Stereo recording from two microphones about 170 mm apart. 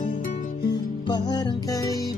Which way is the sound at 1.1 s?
25° left (ahead or behind).